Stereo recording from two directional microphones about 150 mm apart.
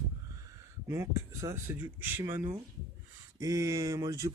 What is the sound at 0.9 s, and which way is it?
Speech, 20° right (ahead or behind).